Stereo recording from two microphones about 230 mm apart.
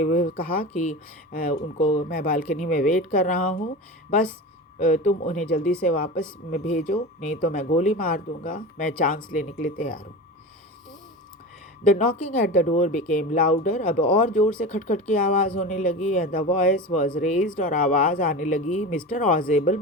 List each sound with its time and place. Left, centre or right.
0.0 s speech: left
4.8 s speech: left
11.9 s speech: left